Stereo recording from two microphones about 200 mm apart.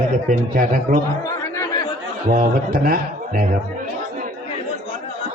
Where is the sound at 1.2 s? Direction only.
15° left (ahead or behind).